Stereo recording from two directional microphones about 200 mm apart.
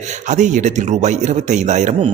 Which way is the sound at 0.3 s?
40° right (ahead or behind).